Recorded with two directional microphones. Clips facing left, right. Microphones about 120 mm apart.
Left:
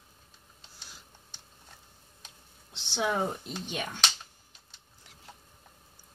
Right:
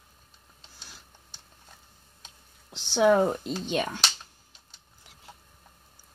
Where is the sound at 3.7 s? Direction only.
90° right.